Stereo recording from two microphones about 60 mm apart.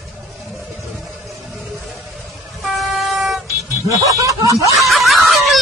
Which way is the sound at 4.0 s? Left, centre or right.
Right.